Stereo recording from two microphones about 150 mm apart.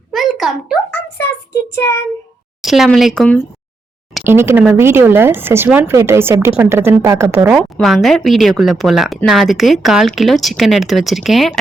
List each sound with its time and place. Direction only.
0.1 s a sound: centre (ahead or behind)
1.7 s child singing: 15° left (ahead or behind)
2.6 s a woman's voice: centre (ahead or behind)
4.2 s a woman's voice: 15° right (ahead or behind)
7.3 s speech: 10° right (ahead or behind)